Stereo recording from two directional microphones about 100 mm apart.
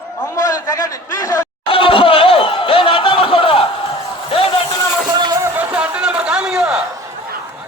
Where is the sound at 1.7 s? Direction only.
60° left (ahead or behind).